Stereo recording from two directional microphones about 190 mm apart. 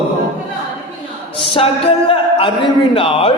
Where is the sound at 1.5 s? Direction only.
30° left (ahead or behind).